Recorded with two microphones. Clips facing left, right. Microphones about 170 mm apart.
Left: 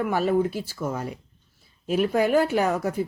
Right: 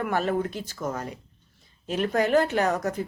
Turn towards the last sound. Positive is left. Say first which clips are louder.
# left 2 dB
turn(degrees=10)  # may be behind; listen again after turning